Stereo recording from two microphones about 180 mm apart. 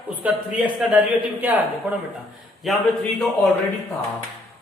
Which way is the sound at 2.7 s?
Centre (ahead or behind).